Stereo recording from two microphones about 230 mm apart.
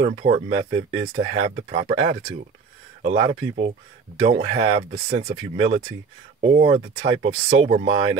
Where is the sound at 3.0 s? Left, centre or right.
Right.